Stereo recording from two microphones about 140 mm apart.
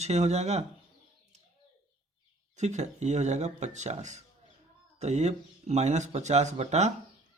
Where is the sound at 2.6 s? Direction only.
55° right (ahead or behind).